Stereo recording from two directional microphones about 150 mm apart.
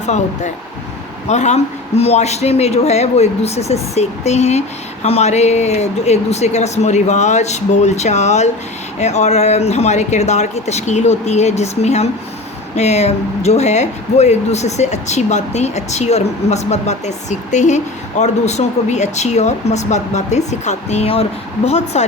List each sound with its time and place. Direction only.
0.0 s speech: 50° left (ahead or behind)